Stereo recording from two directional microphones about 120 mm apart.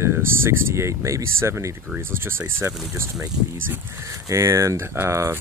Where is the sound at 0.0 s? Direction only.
20° right (ahead or behind).